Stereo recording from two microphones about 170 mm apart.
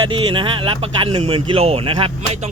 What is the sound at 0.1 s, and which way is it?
Speech, 30° right (ahead or behind).